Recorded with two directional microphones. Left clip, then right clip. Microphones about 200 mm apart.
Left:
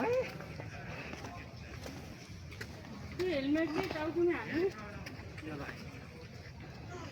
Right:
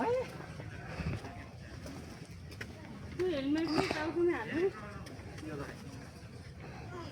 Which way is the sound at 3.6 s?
25° right (ahead or behind).